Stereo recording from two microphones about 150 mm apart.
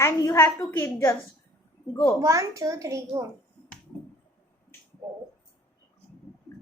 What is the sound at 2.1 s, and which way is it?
A child's voice, 20° right (ahead or behind).